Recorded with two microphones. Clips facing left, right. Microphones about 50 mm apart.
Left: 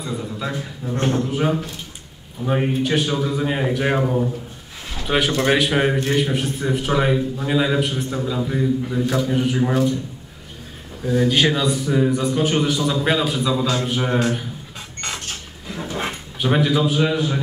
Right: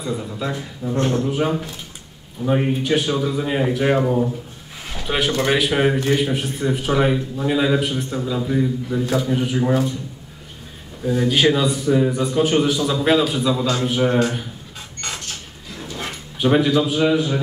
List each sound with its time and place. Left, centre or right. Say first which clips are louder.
0.0 s a man's voice: right 1 dB; centre
9.0 s a man's voice: right 2 dB; centre
9.3 s a man's voice: even; centre
11.1 s a man's voice: right 1 dB; centre
15.7 s dog: left 4 dB; left
16.3 s a man's voice: right 2 dB; centre